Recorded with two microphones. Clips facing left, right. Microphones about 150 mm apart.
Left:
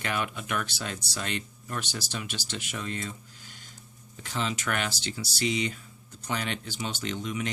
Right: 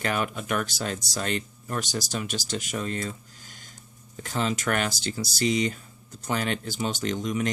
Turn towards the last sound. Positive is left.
turn(degrees=-45)  # may be behind; listen again after turning